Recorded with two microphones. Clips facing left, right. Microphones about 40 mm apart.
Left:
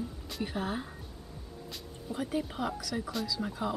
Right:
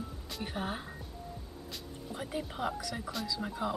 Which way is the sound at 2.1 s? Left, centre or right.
Centre.